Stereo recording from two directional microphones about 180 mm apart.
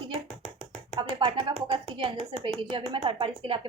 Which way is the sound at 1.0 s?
25° right (ahead or behind).